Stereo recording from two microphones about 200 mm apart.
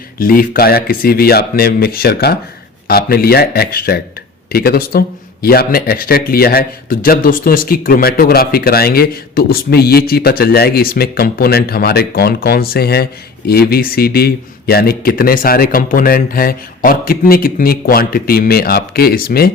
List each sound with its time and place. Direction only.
0.2 s speech: 45° left (ahead or behind)